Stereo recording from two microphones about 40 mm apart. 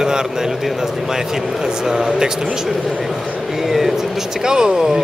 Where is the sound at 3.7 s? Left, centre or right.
Centre.